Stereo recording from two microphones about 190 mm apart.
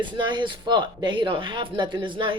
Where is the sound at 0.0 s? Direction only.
25° right (ahead or behind).